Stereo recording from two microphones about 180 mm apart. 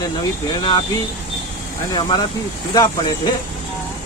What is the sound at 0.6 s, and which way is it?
Speech, 25° left (ahead or behind).